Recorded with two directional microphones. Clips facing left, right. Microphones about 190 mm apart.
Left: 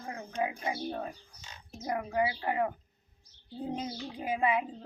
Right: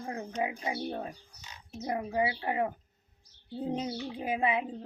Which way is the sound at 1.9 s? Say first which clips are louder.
Even; 25° right (ahead or behind).